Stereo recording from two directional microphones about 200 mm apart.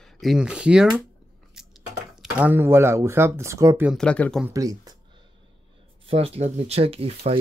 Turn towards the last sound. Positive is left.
turn(degrees=-30)  # may be behind; listen again after turning